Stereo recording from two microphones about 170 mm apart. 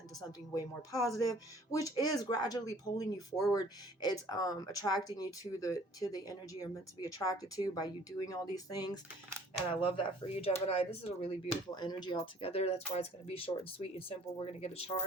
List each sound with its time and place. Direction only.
0.2 s speech: 20° left (ahead or behind)
9.8 s speech: 35° left (ahead or behind)
11.7 s speech: 25° left (ahead or behind)